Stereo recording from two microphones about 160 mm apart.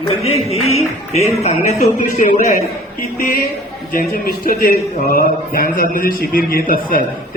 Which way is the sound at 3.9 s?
60° left (ahead or behind).